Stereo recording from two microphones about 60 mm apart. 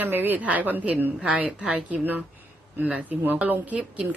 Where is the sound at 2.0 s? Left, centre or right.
Right.